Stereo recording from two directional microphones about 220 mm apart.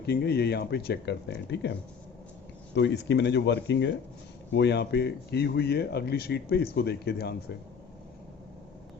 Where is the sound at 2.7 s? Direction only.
50° left (ahead or behind).